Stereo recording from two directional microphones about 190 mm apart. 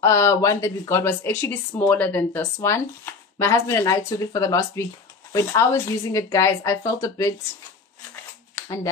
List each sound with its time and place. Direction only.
0.0 s a woman's voice: 15° left (ahead or behind)
8.5 s shuffling cards: 15° left (ahead or behind)